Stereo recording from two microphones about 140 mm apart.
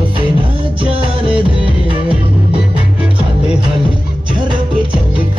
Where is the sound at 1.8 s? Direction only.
40° right (ahead or behind).